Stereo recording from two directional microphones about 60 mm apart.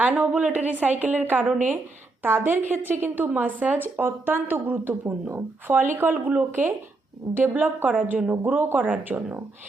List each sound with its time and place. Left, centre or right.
0.0 s a woman's voice: right
6.1 s a woman's voice: right